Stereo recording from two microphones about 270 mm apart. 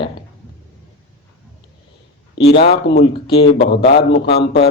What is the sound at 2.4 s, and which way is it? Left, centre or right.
Speech, left.